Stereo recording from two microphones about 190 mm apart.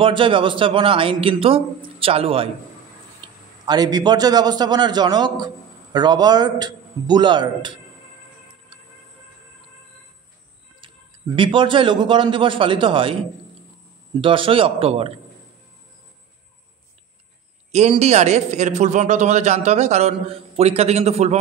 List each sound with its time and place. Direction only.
0.0 s a man's voice: 25° right (ahead or behind)
11.3 s a man's voice: 25° right (ahead or behind)
14.2 s a man's voice: 25° right (ahead or behind)
17.6 s a man's voice: 35° right (ahead or behind)